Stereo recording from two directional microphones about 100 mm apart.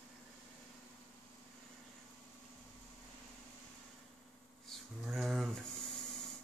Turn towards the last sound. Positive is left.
turn(degrees=0)  # may be behind; listen again after turning